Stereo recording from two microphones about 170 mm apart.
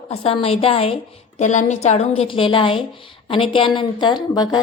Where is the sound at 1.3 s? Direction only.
45° left (ahead or behind); by 4.6 s 25° left (ahead or behind).